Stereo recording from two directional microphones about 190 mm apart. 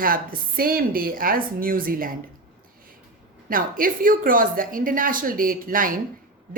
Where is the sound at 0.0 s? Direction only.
50° right (ahead or behind).